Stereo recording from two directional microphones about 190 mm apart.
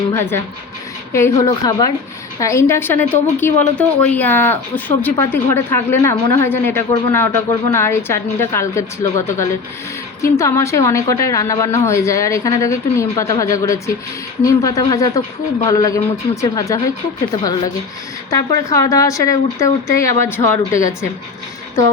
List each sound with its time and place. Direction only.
0.1 s a woman's voice: 10° left (ahead or behind)
18.3 s a woman's voice: 20° left (ahead or behind)